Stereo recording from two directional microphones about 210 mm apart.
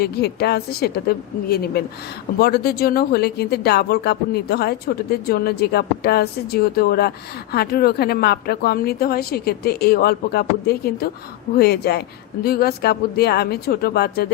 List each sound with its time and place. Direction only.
0.0 s a woman's voice: 50° left (ahead or behind)